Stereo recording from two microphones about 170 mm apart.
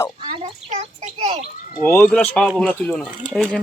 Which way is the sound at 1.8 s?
10° left (ahead or behind).